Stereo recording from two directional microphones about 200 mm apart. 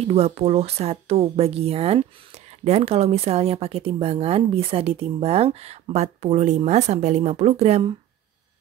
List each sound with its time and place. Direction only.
0.0 s speech: 30° right (ahead or behind)